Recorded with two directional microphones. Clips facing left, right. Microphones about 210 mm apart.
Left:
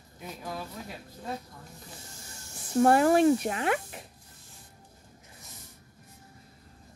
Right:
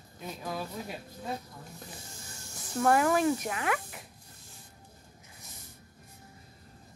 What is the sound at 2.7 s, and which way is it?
Speech, 30° left (ahead or behind).